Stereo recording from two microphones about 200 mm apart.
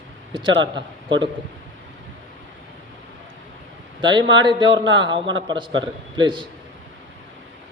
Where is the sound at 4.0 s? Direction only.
25° right (ahead or behind).